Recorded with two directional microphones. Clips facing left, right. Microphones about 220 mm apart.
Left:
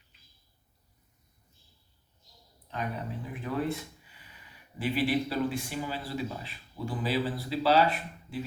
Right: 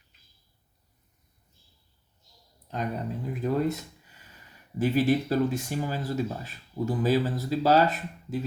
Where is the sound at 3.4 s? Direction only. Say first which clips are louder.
Right 5 dB; 40° right (ahead or behind).